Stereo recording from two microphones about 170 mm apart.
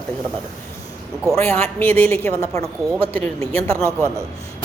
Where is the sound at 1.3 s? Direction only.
15° left (ahead or behind).